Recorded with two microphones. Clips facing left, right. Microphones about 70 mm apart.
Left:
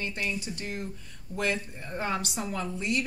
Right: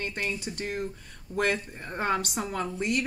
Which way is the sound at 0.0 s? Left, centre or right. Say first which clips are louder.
Right 1 dB; right.